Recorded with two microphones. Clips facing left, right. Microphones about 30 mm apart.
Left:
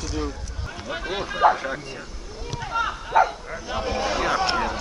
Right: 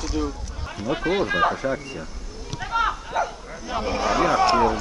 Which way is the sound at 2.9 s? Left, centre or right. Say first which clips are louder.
Left 6 dB; centre.